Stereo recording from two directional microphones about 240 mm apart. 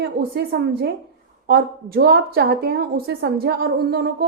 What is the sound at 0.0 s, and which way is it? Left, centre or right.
A woman's voice, right.